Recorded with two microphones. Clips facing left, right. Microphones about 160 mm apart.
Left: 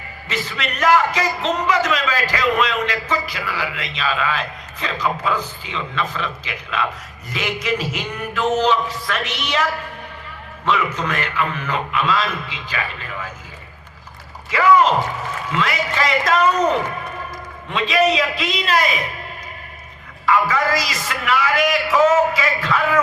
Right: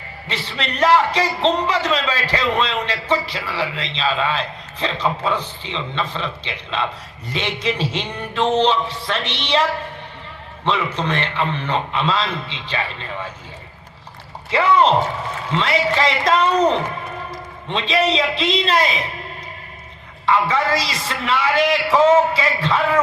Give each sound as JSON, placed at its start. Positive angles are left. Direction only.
{"t": 0.3, "sound": "a man's voice", "side_deg": -30}
{"t": 14.5, "sound": "a man's voice", "side_deg": -30}
{"t": 20.2, "sound": "a man's voice", "side_deg": -30}